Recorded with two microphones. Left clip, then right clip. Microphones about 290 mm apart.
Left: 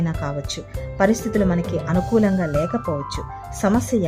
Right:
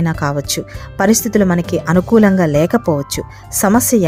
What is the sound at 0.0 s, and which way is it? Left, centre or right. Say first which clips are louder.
Speech: right 9 dB; centre.